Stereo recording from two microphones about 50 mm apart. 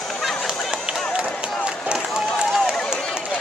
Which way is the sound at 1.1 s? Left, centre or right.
Centre.